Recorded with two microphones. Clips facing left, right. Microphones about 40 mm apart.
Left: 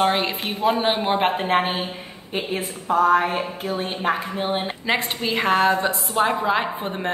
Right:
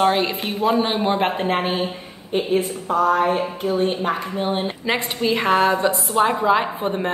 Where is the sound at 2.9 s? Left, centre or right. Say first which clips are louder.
Even; left.